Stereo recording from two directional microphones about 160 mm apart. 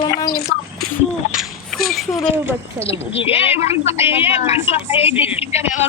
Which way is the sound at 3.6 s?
40° left (ahead or behind).